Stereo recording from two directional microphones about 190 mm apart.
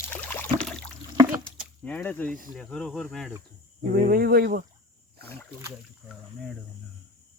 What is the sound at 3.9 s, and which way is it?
Speech, 50° right (ahead or behind).